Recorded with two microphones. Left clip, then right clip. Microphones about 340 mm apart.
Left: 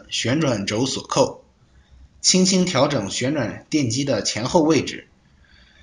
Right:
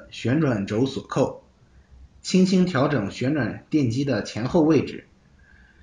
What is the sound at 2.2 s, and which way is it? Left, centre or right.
Speech, left.